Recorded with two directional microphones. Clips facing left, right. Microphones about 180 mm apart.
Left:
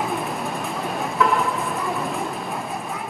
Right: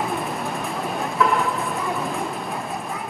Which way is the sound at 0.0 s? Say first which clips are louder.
Even; centre (ahead or behind).